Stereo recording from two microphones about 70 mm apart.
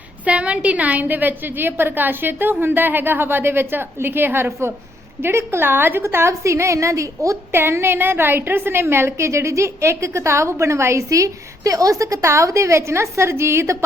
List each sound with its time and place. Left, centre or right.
0.3 s a woman's voice: centre; by 7.3 s right
7.5 s a woman's voice: right